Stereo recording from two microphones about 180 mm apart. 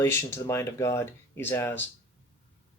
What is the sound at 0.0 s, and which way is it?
Speech, 15° left (ahead or behind).